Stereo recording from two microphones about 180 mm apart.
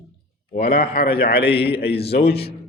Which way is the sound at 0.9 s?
60° left (ahead or behind).